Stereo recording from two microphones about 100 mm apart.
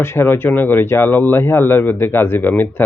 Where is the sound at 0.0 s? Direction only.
25° left (ahead or behind).